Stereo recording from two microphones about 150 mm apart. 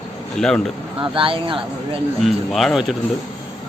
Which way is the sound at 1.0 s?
35° right (ahead or behind).